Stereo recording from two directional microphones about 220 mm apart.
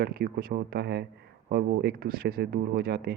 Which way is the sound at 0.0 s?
45° right (ahead or behind).